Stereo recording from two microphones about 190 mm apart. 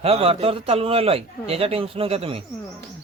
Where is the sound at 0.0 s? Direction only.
30° right (ahead or behind).